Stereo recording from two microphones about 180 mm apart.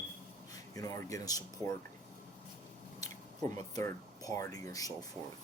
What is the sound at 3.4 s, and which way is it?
Speech, 20° left (ahead or behind).